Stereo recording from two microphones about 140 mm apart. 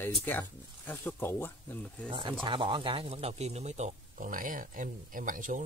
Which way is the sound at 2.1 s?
35° right (ahead or behind).